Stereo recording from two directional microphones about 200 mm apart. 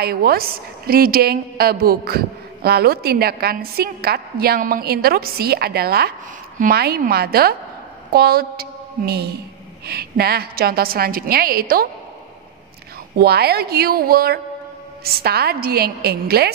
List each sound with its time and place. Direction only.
0.0 s a woman's voice: 50° right (ahead or behind)
13.2 s a woman's voice: 50° right (ahead or behind)